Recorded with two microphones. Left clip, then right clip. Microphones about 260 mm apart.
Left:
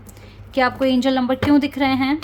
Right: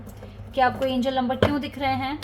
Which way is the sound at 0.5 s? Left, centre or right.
Left.